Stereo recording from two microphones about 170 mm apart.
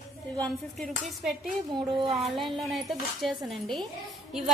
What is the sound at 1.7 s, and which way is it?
Speech, 30° right (ahead or behind).